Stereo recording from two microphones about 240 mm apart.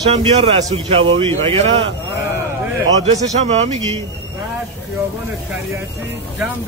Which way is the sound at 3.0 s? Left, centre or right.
Right.